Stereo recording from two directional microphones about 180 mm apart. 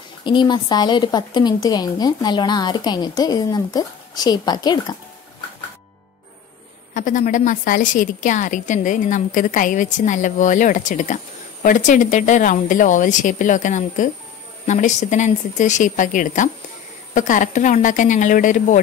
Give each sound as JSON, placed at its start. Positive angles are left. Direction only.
{"t": 0.2, "sound": "speech", "side_deg": 25}
{"t": 6.9, "sound": "a woman's voice", "side_deg": 50}